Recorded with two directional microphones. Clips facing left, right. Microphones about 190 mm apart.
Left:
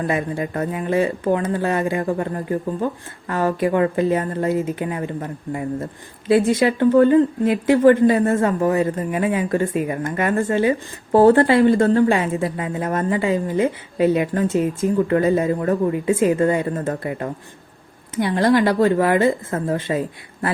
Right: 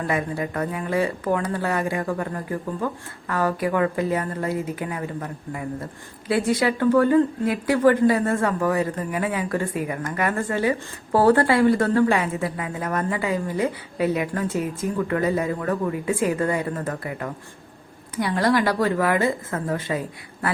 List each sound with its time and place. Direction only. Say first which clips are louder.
0.1 s speech: left 3 dB; 25° left (ahead or behind)